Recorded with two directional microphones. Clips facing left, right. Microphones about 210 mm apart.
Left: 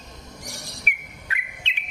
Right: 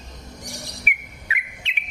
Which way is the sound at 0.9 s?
5° right (ahead or behind).